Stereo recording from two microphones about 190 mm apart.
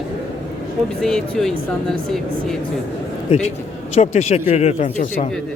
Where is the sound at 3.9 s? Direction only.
35° left (ahead or behind).